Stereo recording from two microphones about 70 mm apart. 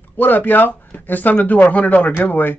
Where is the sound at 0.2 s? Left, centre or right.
Left.